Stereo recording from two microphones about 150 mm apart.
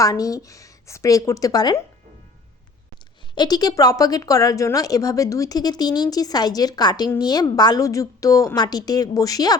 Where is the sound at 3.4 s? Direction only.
25° left (ahead or behind).